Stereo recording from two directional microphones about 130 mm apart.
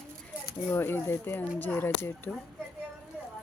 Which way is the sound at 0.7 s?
15° left (ahead or behind).